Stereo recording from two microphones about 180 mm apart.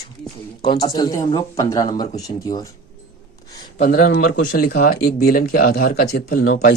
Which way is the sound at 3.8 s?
55° left (ahead or behind).